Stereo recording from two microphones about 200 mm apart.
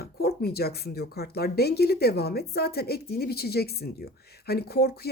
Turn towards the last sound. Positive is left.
turn(degrees=50)  # may be behind; listen again after turning